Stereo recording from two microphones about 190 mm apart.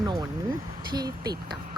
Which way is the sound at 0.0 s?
20° right (ahead or behind).